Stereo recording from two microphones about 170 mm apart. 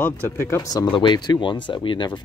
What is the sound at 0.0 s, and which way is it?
Speech, 15° left (ahead or behind).